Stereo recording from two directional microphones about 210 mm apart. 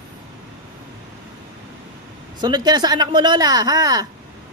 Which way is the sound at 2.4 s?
20° right (ahead or behind).